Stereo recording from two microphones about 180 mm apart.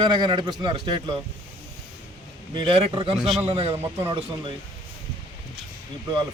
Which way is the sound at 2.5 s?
30° right (ahead or behind).